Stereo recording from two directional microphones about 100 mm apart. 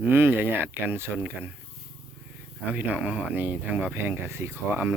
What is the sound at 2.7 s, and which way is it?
Speech, 15° right (ahead or behind).